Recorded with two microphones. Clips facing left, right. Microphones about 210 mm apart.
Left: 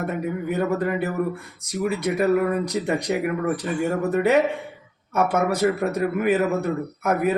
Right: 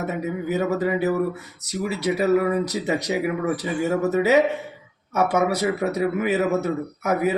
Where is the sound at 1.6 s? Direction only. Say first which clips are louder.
Right 1 dB; 70° right (ahead or behind).